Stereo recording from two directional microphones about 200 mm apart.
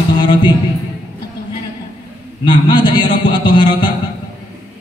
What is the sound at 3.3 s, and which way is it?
Music, 25° left (ahead or behind).